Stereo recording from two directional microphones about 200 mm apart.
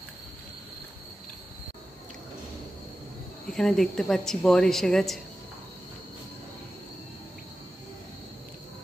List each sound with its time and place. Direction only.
3.4 s speech: 5° left (ahead or behind)